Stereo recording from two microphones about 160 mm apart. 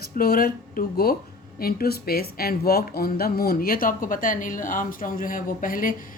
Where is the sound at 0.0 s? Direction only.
70° left (ahead or behind).